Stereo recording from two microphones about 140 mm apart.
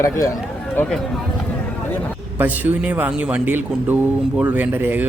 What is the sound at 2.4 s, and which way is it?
A man's voice, 10° right (ahead or behind).